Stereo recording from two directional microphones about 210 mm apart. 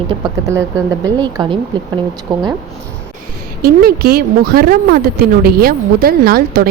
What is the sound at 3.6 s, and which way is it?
A woman's voice, 45° right (ahead or behind).